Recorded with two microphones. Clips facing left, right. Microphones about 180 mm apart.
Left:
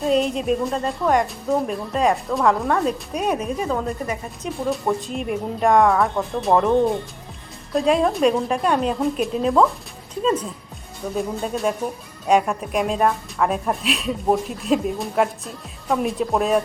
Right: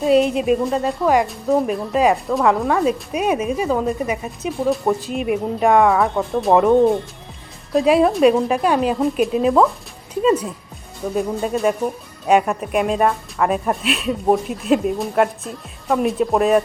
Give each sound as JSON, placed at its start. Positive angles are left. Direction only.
{"t": 0.0, "sound": "a woman's voice", "side_deg": -5}